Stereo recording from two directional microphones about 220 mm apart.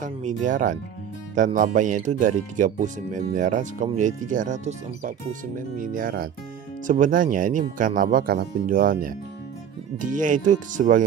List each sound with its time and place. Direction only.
0.0 s speech: 35° right (ahead or behind)
10.1 s speech: 35° right (ahead or behind)